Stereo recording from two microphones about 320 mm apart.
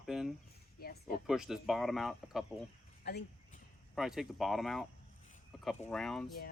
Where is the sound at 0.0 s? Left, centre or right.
Centre.